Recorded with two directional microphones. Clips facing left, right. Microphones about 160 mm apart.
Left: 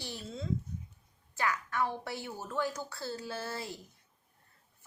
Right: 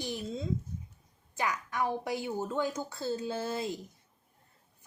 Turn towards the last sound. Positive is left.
turn(degrees=-20)  # may be behind; listen again after turning